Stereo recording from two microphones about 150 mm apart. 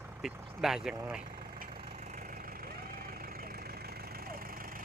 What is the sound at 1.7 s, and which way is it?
Vehicle, 90° right.